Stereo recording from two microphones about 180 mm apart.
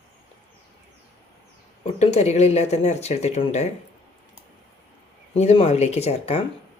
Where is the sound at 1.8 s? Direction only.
35° left (ahead or behind).